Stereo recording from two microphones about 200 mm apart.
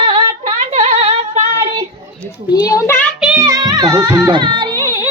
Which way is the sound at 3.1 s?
5° right (ahead or behind).